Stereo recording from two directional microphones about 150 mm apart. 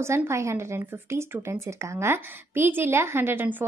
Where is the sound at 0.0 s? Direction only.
20° right (ahead or behind).